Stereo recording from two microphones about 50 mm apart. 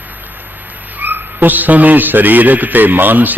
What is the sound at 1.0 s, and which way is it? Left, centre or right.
A man's voice, right.